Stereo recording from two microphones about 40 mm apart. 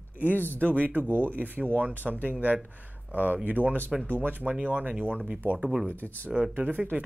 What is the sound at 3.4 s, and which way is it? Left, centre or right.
Speech, right.